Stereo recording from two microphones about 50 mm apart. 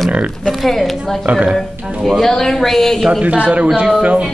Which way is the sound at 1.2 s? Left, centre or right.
Right.